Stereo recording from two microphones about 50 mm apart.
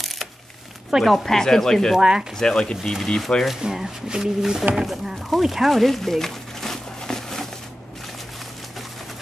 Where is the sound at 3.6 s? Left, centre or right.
Centre.